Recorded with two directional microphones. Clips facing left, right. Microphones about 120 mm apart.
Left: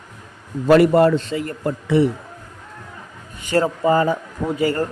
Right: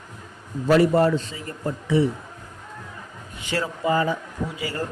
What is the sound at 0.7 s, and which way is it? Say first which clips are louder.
A man's voice: left 5 dB; 65° left (ahead or behind).